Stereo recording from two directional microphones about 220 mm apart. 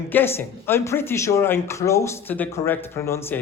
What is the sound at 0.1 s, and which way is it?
Speech, 10° left (ahead or behind).